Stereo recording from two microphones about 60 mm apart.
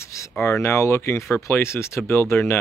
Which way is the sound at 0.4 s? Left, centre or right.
Left.